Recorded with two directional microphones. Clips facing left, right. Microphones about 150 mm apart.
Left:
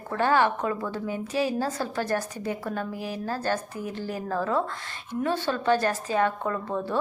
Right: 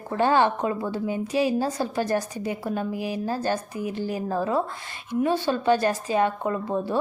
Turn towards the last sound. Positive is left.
turn(degrees=-15)  # may be behind; listen again after turning